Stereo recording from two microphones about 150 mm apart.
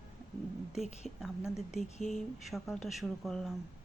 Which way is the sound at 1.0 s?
Centre (ahead or behind).